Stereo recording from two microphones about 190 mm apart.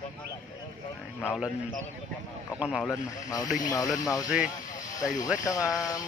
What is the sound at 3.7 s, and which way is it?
Speech, 20° left (ahead or behind).